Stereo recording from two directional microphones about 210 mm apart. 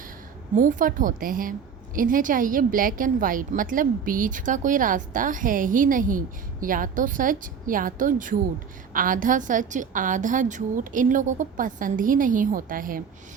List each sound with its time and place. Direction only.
0.5 s a woman's voice: 40° right (ahead or behind)